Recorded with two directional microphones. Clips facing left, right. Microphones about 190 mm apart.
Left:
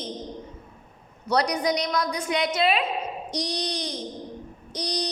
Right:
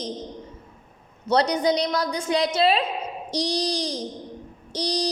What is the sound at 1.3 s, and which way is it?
A woman's voice, 25° right (ahead or behind).